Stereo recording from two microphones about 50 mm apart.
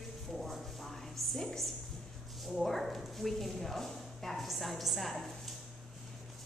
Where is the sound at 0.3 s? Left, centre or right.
Centre.